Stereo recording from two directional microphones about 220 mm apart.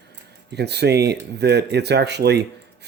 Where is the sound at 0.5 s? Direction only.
50° right (ahead or behind).